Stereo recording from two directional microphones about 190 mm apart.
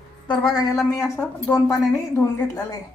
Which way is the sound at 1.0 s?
10° left (ahead or behind).